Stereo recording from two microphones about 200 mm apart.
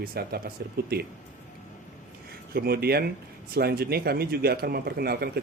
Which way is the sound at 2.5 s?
50° right (ahead or behind).